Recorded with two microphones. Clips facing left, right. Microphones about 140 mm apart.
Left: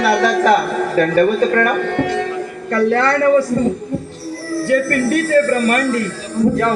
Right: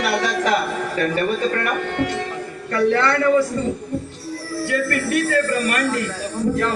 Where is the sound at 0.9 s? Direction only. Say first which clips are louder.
Left 8 dB; 40° left (ahead or behind).